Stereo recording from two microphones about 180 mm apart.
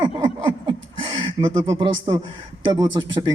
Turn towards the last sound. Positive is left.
turn(degrees=-25)  # may be behind; listen again after turning